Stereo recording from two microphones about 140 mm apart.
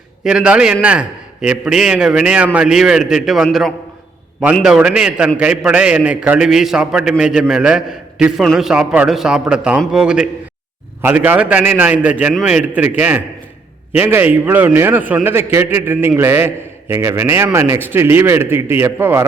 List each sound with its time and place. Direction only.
0.3 s a man's voice: 5° right (ahead or behind)